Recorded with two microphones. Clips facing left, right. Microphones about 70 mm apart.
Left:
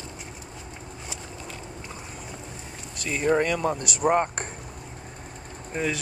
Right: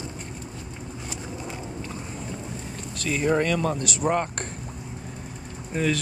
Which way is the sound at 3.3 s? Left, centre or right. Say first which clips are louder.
Left 2 dB; centre.